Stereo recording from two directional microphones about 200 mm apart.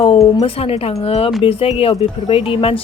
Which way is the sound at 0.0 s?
30° left (ahead or behind).